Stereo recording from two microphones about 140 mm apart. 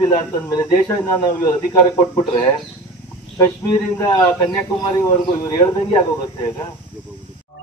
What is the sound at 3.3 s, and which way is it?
Speech, 25° left (ahead or behind).